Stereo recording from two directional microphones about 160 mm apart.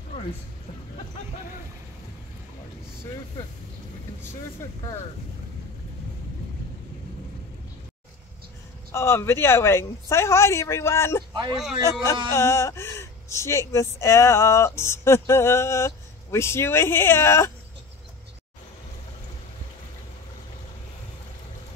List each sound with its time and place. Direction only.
8.9 s speech: 15° left (ahead or behind)